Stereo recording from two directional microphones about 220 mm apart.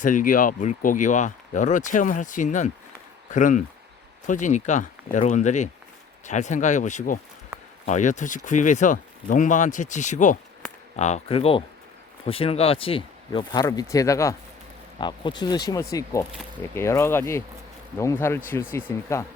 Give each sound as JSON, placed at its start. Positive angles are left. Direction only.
{"t": 0.0, "sound": "speech", "side_deg": 35}